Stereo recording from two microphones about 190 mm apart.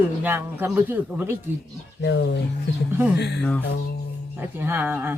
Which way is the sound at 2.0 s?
65° left (ahead or behind).